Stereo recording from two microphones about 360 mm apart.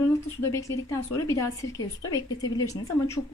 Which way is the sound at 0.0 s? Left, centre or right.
Centre.